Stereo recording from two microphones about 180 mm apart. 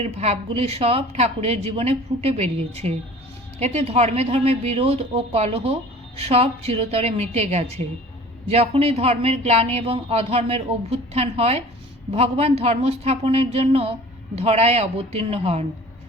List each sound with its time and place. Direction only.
0.0 s speech: 35° right (ahead or behind)